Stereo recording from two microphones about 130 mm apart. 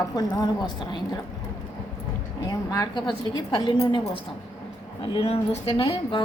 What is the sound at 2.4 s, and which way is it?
A woman's voice, 30° left (ahead or behind).